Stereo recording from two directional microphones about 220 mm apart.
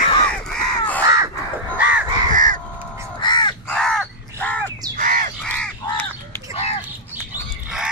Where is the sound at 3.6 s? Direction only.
5° left (ahead or behind).